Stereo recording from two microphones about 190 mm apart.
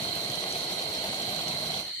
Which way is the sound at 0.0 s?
20° left (ahead or behind).